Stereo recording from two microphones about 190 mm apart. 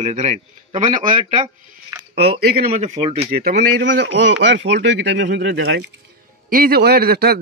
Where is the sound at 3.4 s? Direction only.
70° right (ahead or behind).